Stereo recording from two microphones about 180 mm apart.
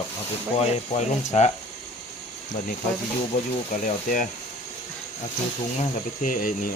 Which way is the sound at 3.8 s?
45° left (ahead or behind).